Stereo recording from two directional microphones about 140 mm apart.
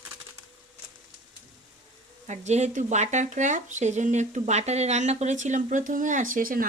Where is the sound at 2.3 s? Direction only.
55° right (ahead or behind).